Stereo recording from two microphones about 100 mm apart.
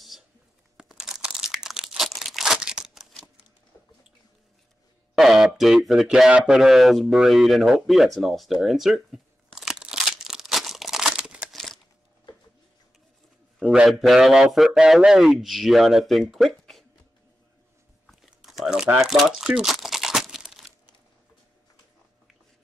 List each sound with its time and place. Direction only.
0.7 s crumpling: 5° right (ahead or behind)
5.1 s a sound: 5° right (ahead or behind)
11.5 s crumpling: 5° left (ahead or behind)
13.6 s speech: 5° right (ahead or behind)
18.0 s crumpling: centre (ahead or behind)